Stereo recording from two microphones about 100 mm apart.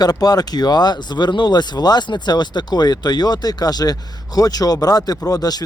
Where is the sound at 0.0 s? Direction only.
40° left (ahead or behind).